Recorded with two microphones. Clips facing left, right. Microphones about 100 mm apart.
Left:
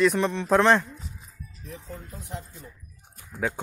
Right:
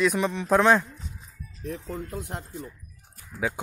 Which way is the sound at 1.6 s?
70° right (ahead or behind).